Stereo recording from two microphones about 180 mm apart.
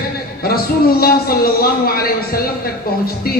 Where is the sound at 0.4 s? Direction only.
55° left (ahead or behind).